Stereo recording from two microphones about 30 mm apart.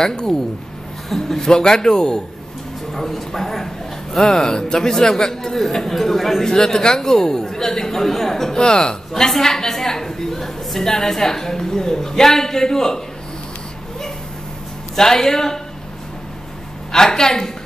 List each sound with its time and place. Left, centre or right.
0.0 s a man's voice: left
2.9 s a man's voice: centre
4.2 s a man's voice: left
6.4 s a woman's voice: centre
8.5 s a man's voice: left
9.1 s a woman's voice: centre
15.0 s a woman's voice: centre
16.9 s a woman's voice: centre